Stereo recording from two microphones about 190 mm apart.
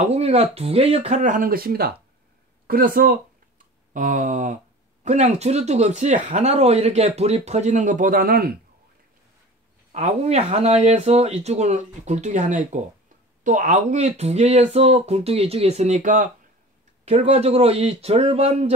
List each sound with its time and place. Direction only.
0.0 s speech: 35° right (ahead or behind); by 8.5 s 50° right (ahead or behind)
9.9 s speech: 35° right (ahead or behind)